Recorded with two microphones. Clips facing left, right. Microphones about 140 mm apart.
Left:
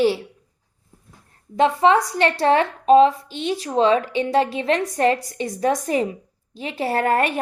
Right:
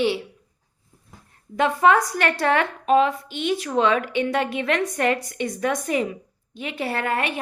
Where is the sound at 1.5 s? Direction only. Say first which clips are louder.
Left 2 dB; 30° left (ahead or behind).